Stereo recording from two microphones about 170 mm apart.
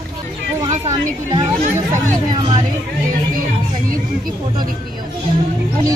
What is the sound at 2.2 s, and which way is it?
Speech, 25° right (ahead or behind).